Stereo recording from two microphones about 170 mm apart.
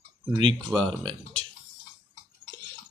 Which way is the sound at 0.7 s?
5° left (ahead or behind).